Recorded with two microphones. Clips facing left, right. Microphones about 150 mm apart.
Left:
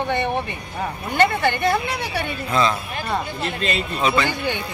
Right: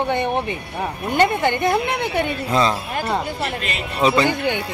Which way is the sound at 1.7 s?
60° right (ahead or behind).